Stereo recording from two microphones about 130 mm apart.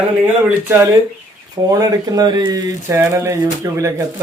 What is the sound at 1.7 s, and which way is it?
Speech, 30° right (ahead or behind).